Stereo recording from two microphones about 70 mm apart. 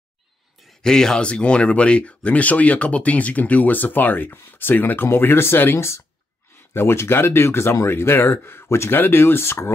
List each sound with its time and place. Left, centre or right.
0.8 s speech: centre; by 9.7 s left